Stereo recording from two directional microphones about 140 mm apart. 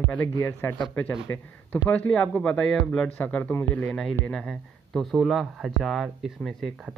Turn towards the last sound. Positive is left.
turn(degrees=0)  # may be behind; listen again after turning